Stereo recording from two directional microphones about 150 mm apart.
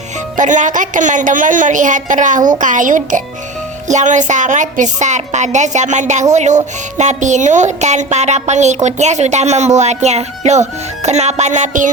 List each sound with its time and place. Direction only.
0.3 s a woman's voice: 55° right (ahead or behind)